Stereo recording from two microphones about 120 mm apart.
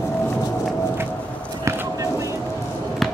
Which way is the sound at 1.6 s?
25° right (ahead or behind).